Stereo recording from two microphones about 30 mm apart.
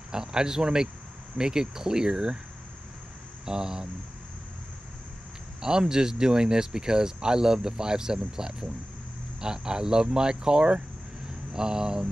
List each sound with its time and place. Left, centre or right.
0.1 s speech: right
3.4 s speech: right
5.6 s speech: right